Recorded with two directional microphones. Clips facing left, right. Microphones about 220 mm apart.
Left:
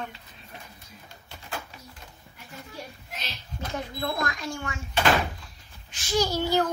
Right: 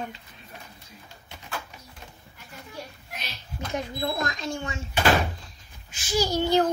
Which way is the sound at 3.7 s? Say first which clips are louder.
Right 2 dB; 20° right (ahead or behind).